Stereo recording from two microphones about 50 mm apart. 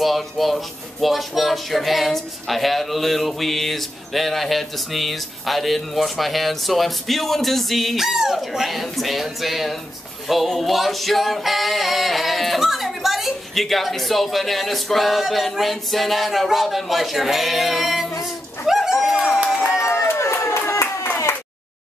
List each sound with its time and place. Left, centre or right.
0.0 s speech: centre
18.7 s bird: centre
19.4 s a sound: centre
19.8 s run: left
20.3 s clapping: left